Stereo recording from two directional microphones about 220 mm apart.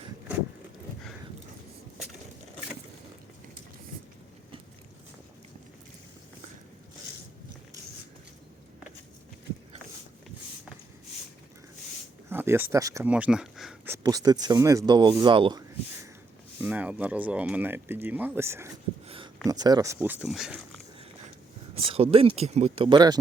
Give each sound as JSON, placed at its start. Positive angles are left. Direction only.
{"t": 12.3, "sound": "speech", "side_deg": -10}
{"t": 13.9, "sound": "speech", "side_deg": -15}
{"t": 16.6, "sound": "speech", "side_deg": -5}
{"t": 19.0, "sound": "a sound", "side_deg": -25}
{"t": 19.5, "sound": "speech", "side_deg": -15}
{"t": 21.8, "sound": "speech", "side_deg": -25}